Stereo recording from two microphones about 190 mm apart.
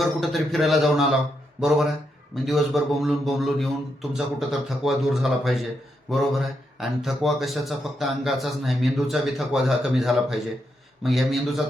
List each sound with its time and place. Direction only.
0.0 s speech: centre (ahead or behind)
2.3 s speech: centre (ahead or behind)